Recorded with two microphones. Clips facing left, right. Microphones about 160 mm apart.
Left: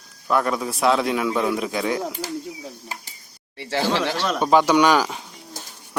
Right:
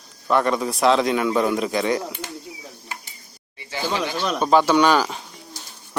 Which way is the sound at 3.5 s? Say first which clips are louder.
Left 3 dB; 80° left.